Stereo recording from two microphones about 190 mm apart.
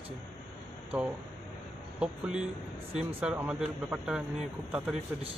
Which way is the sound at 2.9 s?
30° right (ahead or behind).